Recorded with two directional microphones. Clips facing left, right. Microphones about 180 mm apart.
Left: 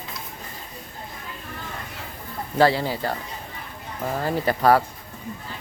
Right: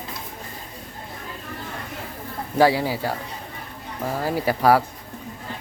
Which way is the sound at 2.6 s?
10° right (ahead or behind).